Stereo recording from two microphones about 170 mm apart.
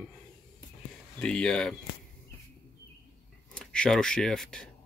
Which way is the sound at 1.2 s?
5° left (ahead or behind).